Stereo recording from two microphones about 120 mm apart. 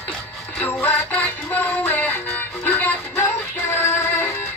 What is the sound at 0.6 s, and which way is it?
Music, 15° left (ahead or behind).